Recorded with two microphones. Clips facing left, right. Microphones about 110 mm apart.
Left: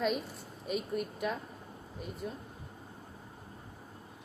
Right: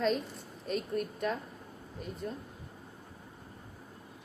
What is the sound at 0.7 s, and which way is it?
A woman's voice, 5° left (ahead or behind).